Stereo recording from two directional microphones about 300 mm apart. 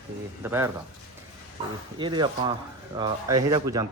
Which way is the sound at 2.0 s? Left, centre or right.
Centre.